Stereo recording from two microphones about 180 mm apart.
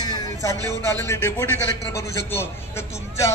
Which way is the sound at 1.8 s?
65° left (ahead or behind).